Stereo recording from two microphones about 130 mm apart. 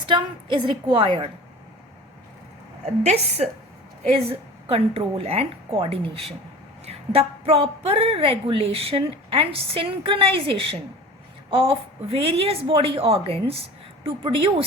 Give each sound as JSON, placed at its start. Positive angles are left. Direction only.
{"t": 0.1, "sound": "a woman's voice", "side_deg": -35}
{"t": 3.0, "sound": "a woman's voice", "side_deg": -60}